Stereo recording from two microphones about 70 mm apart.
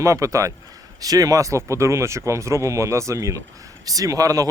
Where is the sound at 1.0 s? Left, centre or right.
Right.